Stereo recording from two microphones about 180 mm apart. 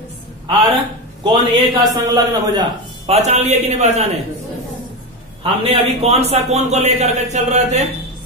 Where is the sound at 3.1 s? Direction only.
35° right (ahead or behind).